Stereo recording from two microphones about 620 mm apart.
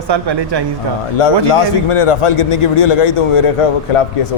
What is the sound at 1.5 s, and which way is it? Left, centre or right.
Speech, left.